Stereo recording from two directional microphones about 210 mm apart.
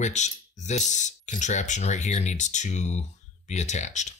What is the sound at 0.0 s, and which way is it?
Speech, 35° left (ahead or behind).